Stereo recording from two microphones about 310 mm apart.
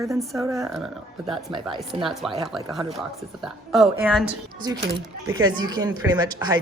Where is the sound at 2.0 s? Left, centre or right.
Centre.